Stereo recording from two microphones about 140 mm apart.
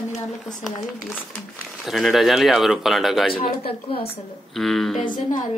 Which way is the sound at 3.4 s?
45° left (ahead or behind).